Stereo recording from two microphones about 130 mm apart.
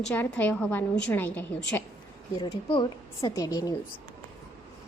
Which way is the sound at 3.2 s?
25° left (ahead or behind).